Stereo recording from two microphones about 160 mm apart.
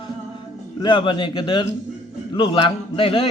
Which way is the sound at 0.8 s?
30° left (ahead or behind).